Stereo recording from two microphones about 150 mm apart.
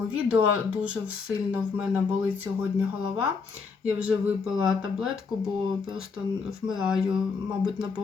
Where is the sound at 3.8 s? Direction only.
10° right (ahead or behind).